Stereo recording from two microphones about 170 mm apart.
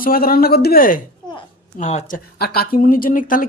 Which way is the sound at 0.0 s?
60° left (ahead or behind).